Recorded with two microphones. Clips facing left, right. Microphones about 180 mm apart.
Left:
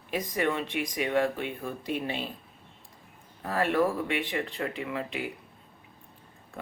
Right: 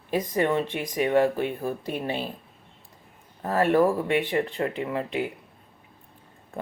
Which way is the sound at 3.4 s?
45° right (ahead or behind).